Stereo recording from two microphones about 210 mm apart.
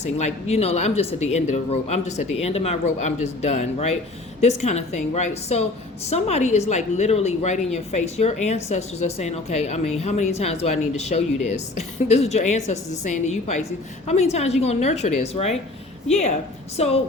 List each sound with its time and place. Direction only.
0.0 s speech: 30° left (ahead or behind)
16.7 s speech: 30° left (ahead or behind)